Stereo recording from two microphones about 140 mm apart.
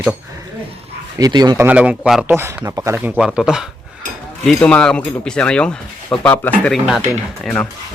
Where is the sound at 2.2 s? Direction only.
15° right (ahead or behind).